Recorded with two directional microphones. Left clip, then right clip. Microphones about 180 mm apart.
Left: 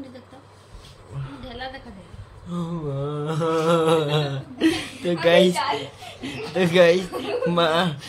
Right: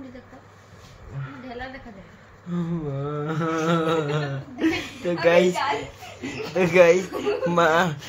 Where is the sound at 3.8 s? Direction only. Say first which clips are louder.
Left 4 dB; 50° left (ahead or behind).